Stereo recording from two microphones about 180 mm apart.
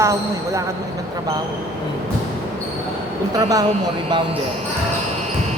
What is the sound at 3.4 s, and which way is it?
Speech, 20° right (ahead or behind).